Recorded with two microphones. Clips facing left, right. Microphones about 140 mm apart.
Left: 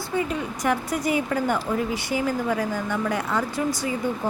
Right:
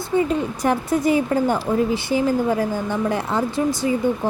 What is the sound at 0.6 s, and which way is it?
A woman's voice, 30° right (ahead or behind).